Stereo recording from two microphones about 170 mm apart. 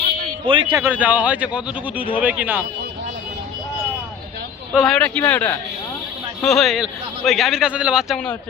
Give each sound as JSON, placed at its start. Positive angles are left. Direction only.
{"t": 0.4, "sound": "speech", "side_deg": -30}
{"t": 0.8, "sound": "speech", "side_deg": -10}
{"t": 4.7, "sound": "speech", "side_deg": -5}
{"t": 4.9, "sound": "a man's voice", "side_deg": 10}